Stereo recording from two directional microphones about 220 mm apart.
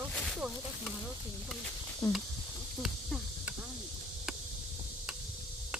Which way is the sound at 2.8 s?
Centre (ahead or behind).